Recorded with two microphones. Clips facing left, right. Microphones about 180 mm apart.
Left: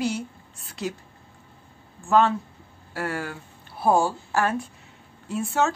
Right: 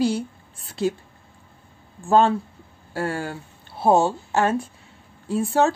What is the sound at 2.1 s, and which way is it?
A woman's voice, 30° right (ahead or behind).